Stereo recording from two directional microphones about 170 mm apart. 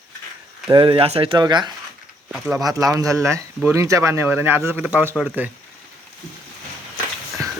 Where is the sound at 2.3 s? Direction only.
5° right (ahead or behind).